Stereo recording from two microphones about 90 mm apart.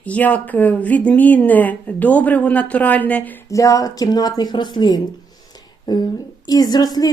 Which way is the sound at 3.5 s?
40° left (ahead or behind).